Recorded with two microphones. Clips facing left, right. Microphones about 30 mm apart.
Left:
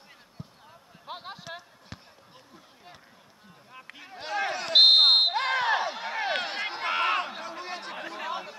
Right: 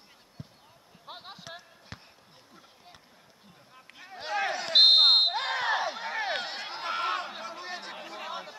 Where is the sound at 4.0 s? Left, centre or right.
Centre.